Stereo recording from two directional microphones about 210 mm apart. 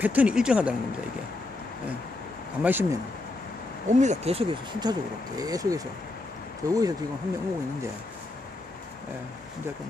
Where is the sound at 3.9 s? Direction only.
35° right (ahead or behind); by 5.8 s 15° right (ahead or behind).